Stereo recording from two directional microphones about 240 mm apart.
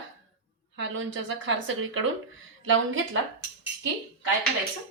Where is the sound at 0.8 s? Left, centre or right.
Right.